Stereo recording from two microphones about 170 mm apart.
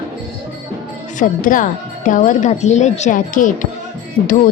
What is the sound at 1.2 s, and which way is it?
Speech, 50° left (ahead or behind).